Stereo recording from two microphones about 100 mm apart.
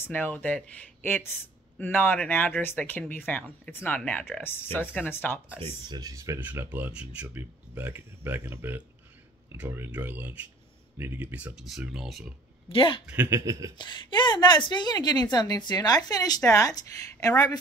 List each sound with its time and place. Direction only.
0.0 s speech: 15° left (ahead or behind)
5.9 s speech: 40° right (ahead or behind)
6.4 s speech: 15° right (ahead or behind); by 12.3 s centre (ahead or behind)
12.6 s speech: 60° left (ahead or behind)
13.0 s speech: 15° right (ahead or behind)
13.3 s speech: 30° right (ahead or behind)
13.7 s a woman's voice: 50° left (ahead or behind)